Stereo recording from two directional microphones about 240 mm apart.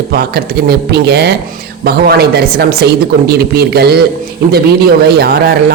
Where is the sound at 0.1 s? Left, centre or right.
Right.